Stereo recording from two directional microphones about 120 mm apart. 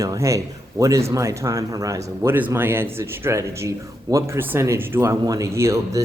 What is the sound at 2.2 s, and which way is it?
Speech, 15° right (ahead or behind).